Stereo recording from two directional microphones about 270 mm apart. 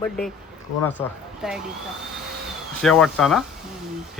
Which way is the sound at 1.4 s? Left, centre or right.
Centre.